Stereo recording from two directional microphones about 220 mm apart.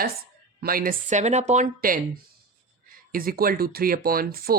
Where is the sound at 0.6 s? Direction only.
40° right (ahead or behind).